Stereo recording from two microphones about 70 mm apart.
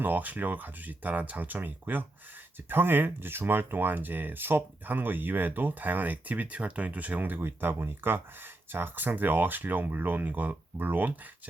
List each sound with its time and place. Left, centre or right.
0.0 s speech: right